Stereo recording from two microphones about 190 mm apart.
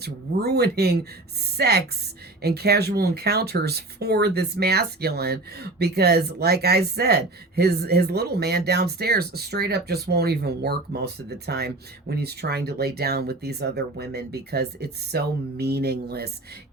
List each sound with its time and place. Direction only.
0.0 s speech: 55° right (ahead or behind)